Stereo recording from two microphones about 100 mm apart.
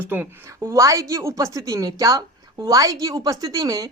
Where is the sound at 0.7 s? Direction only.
30° right (ahead or behind).